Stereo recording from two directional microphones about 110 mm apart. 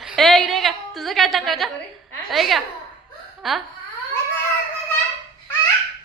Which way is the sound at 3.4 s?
Centre (ahead or behind).